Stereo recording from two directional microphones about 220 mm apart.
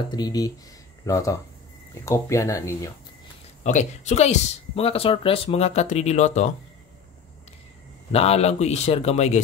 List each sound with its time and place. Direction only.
0.1 s speech: 20° left (ahead or behind)
3.6 s speech: 30° left (ahead or behind)
8.1 s a man's voice: 30° left (ahead or behind)